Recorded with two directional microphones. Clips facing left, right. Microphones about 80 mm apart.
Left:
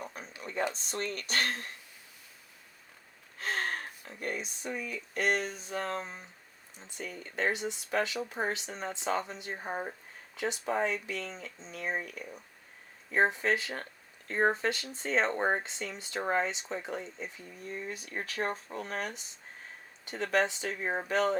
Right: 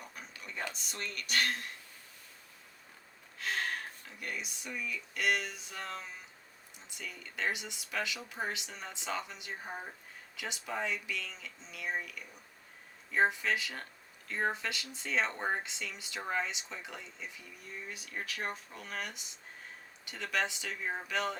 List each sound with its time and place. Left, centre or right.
0.0 s a sound: left
0.6 s speech: left
3.3 s speech: left